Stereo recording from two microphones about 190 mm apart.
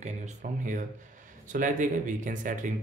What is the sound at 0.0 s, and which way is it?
Speech, 40° right (ahead or behind).